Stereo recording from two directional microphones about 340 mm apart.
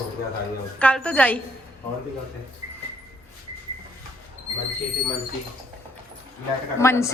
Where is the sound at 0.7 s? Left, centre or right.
Centre.